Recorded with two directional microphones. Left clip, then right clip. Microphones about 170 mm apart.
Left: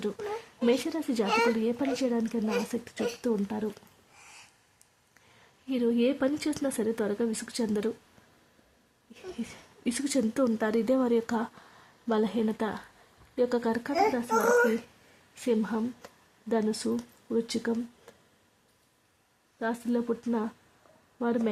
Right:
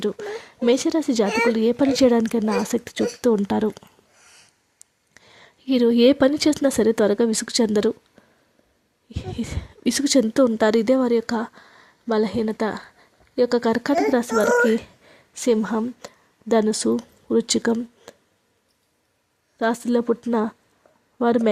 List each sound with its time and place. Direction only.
0.0 s speech: 40° right (ahead or behind); by 3.7 s 60° right (ahead or behind)
5.6 s speech: 45° right (ahead or behind)
9.3 s speech: 40° right (ahead or behind)
13.9 s speech: 50° right (ahead or behind)
19.5 s speech: 45° right (ahead or behind)
21.2 s speech: 45° right (ahead or behind)